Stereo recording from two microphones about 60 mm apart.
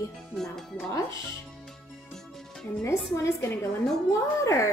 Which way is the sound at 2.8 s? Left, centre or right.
Left.